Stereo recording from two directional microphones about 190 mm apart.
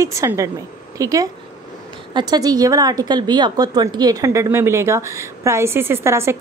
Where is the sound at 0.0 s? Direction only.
15° right (ahead or behind).